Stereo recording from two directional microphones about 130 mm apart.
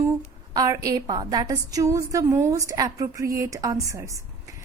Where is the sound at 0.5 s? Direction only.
30° right (ahead or behind).